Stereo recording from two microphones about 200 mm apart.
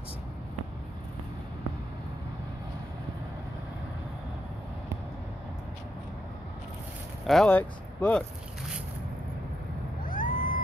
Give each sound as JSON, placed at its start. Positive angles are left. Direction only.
{"t": 7.2, "sound": "speech", "side_deg": 5}
{"t": 10.0, "sound": "vehicle", "side_deg": 40}